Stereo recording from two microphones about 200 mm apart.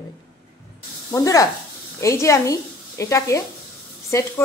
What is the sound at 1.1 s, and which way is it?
Speech, 15° left (ahead or behind).